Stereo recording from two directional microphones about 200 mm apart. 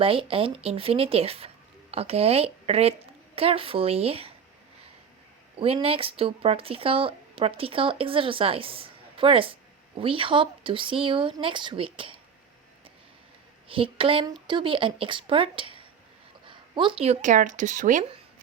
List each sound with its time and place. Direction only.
0.0 s a woman's voice: 25° right (ahead or behind)
5.5 s speech: 30° right (ahead or behind)
13.7 s speech: 25° right (ahead or behind)